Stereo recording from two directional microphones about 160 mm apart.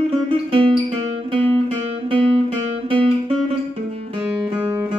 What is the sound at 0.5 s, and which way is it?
Music, 35° right (ahead or behind).